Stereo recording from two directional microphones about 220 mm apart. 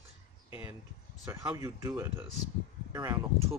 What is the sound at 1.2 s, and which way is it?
Speech, 15° right (ahead or behind).